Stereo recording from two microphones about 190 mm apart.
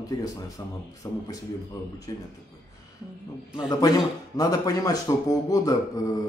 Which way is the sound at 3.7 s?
20° left (ahead or behind).